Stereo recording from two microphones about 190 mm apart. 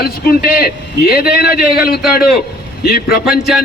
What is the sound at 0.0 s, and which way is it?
A man's voice, 50° left (ahead or behind).